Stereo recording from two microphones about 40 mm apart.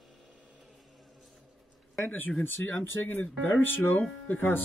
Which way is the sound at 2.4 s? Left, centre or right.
Left.